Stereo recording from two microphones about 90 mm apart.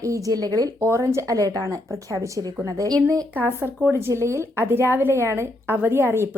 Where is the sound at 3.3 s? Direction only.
25° right (ahead or behind).